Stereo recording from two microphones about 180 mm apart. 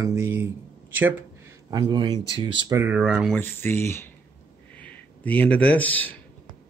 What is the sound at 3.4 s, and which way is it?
Speech, 10° left (ahead or behind).